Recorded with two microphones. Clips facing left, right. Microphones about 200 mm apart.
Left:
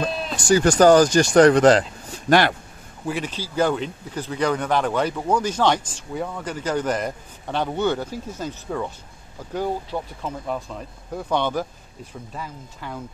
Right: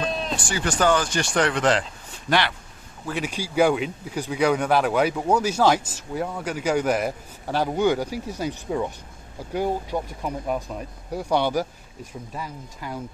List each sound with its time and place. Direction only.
0.4 s speech: 40° left (ahead or behind)
3.2 s speech: 10° right (ahead or behind)